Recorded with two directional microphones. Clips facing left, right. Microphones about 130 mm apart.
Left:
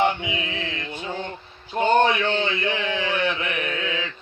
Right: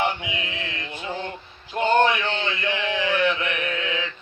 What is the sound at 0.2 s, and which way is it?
Mantra, 25° left (ahead or behind).